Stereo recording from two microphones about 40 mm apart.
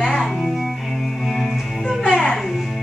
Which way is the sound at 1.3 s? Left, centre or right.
Centre.